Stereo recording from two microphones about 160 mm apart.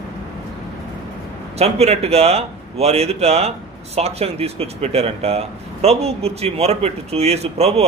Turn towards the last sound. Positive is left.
turn(degrees=-40)  # may be behind; listen again after turning